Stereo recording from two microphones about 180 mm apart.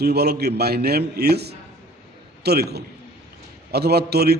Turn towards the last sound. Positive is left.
turn(degrees=-60)  # may be behind; listen again after turning